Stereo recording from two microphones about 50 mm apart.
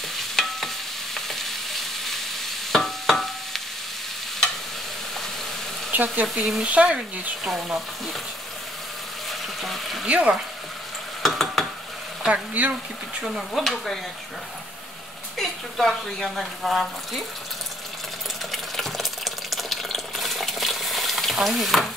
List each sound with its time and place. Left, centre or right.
0.4 s stir: centre
5.9 s frying: right
6.2 s speech: centre
6.6 s speech: right
7.0 s speech: centre
9.3 s a sound: centre
10.0 s speech: right
11.2 s stir: centre
12.3 s speech: right
13.5 s speech: centre
15.3 s speech: centre
18.5 s water: centre